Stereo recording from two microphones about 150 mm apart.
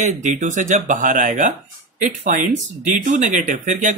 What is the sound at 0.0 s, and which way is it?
Speech, 55° right (ahead or behind).